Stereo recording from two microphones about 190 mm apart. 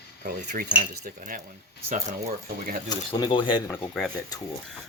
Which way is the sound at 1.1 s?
45° right (ahead or behind).